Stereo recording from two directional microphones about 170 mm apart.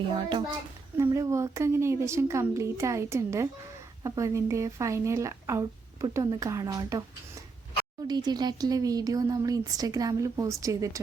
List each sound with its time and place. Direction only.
0.1 s a woman's voice: 30° right (ahead or behind)
8.0 s speech: 25° right (ahead or behind)